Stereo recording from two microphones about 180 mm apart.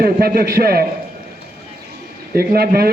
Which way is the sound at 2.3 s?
60° right (ahead or behind).